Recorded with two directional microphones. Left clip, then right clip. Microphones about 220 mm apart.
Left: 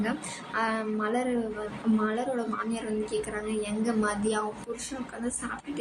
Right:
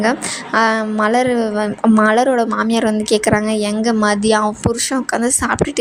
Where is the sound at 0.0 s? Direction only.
45° right (ahead or behind).